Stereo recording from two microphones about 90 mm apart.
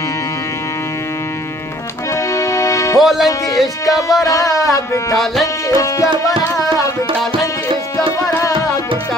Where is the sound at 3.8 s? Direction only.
40° left (ahead or behind).